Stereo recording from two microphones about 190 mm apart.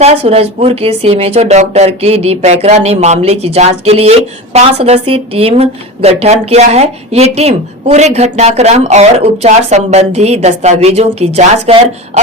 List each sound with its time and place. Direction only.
0.0 s a woman's voice: 35° right (ahead or behind)